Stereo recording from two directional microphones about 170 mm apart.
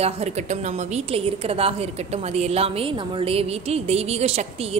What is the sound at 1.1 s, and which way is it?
A woman's voice, 35° right (ahead or behind).